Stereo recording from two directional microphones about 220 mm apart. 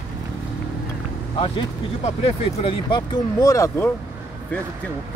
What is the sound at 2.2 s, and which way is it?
Speech, 25° left (ahead or behind).